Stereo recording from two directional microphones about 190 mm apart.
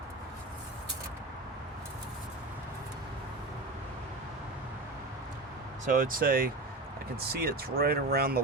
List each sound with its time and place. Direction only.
5.8 s speech: 45° right (ahead or behind)